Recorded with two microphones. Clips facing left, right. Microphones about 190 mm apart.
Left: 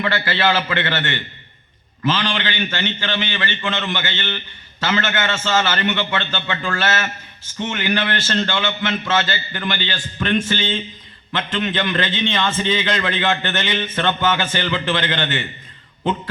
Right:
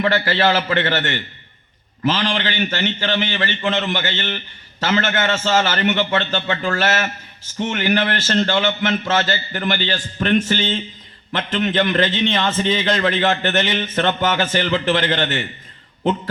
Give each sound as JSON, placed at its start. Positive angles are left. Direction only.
{"t": 0.0, "sound": "a man's voice", "side_deg": -35}